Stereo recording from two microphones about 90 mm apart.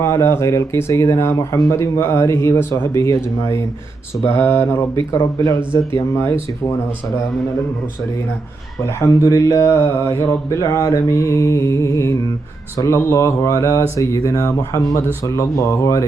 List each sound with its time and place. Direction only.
0.0 s speech: 30° left (ahead or behind)
9.0 s speech: 40° left (ahead or behind)